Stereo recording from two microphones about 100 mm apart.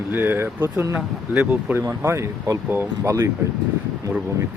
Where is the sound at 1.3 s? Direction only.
10° right (ahead or behind).